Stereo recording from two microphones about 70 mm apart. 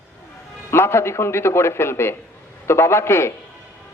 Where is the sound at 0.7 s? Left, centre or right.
Left.